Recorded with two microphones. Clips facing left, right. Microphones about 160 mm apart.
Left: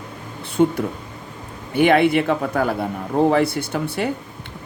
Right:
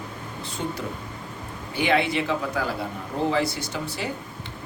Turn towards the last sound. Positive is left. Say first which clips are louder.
# left 7 dB
turn(degrees=60)  # may be behind; listen again after turning